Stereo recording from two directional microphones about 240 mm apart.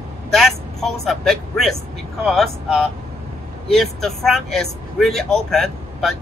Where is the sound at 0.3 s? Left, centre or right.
Centre.